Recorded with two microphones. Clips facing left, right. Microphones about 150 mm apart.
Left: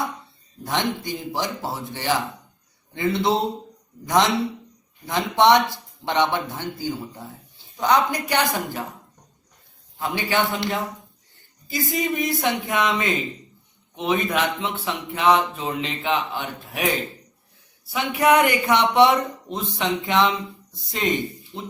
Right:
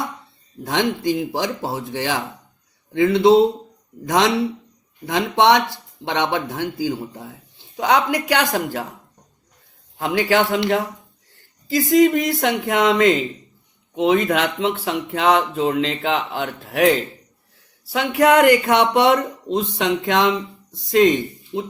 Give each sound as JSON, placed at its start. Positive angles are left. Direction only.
{"t": 0.7, "sound": "speech", "side_deg": -90}
{"t": 5.0, "sound": "speech", "side_deg": -80}
{"t": 10.0, "sound": "speech", "side_deg": -90}
{"t": 17.9, "sound": "speech", "side_deg": -75}
{"t": 20.9, "sound": "speech", "side_deg": -90}